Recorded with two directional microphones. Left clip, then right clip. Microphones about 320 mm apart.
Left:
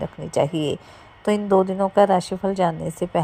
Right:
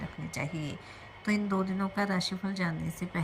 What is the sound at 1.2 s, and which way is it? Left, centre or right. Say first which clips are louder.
A woman's voice: left 14 dB; left.